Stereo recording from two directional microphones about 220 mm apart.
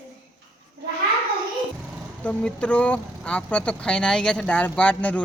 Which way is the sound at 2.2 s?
5° left (ahead or behind).